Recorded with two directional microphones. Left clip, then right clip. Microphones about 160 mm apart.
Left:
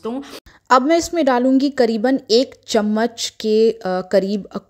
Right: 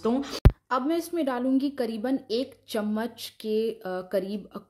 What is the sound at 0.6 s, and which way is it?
A woman's voice, 55° left (ahead or behind).